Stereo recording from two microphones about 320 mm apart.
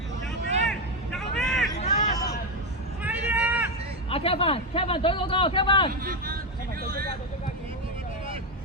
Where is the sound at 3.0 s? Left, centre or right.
Centre.